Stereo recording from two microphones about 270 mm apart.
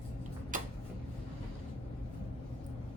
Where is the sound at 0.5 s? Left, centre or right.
Right.